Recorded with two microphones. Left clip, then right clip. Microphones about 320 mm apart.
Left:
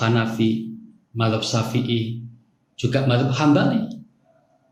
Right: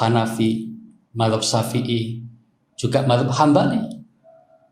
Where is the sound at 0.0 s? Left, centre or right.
Centre.